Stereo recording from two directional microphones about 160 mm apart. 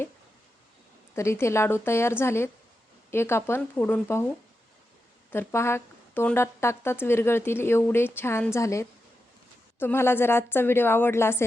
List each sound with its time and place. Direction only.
1.1 s speech: 15° left (ahead or behind)
5.3 s speech: 15° left (ahead or behind)